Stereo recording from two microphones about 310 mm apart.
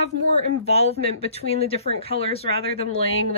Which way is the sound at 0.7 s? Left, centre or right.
Centre.